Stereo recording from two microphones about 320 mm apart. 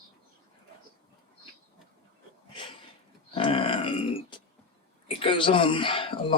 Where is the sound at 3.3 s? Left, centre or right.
Centre.